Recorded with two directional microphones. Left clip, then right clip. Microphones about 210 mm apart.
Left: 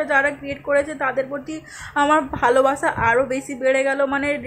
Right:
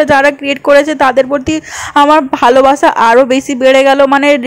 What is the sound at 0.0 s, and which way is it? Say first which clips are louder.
A woman's voice: right 11 dB; 35° right (ahead or behind).